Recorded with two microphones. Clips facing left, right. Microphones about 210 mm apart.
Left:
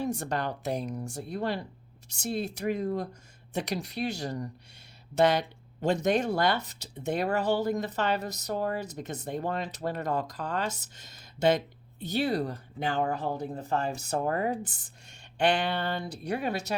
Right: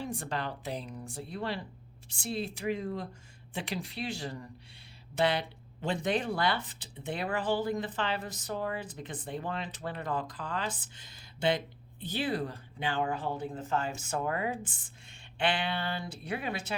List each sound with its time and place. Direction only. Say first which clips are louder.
0.0 s speech: left 5 dB; 45° left (ahead or behind)